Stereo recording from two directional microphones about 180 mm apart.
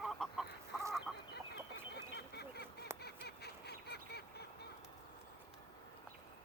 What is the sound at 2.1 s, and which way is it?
Goose, 65° left (ahead or behind).